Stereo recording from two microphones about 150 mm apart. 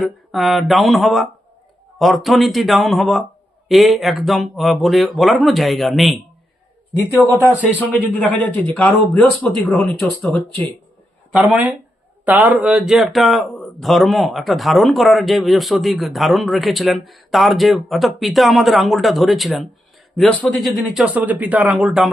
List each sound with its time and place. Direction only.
0.0 s speech: centre (ahead or behind)
7.6 s speech: 10° left (ahead or behind)